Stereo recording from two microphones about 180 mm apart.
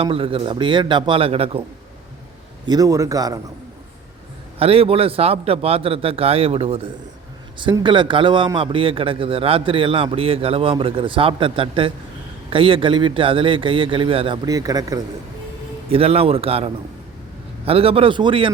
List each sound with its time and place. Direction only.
0.0 s a man's voice: 30° right (ahead or behind)
2.6 s a man's voice: 20° right (ahead or behind)
4.6 s a man's voice: 30° right (ahead or behind)
15.9 s a man's voice: 30° right (ahead or behind)